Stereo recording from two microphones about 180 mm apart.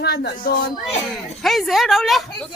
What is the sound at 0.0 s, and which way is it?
Speech, 65° left (ahead or behind).